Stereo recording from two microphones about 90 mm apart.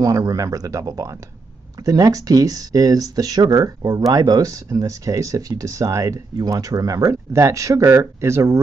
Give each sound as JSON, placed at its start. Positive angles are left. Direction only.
{"t": 0.0, "sound": "speech", "side_deg": -40}